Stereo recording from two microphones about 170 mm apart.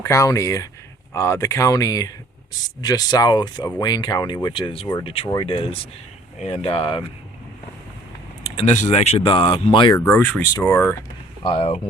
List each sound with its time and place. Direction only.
0.0 s speech: 15° left (ahead or behind)
8.6 s speech: 45° left (ahead or behind); by 10.0 s 30° left (ahead or behind)
10.0 s speech: 10° left (ahead or behind)
11.4 s speech: 35° left (ahead or behind)